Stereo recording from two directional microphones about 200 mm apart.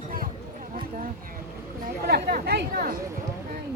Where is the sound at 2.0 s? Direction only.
50° right (ahead or behind).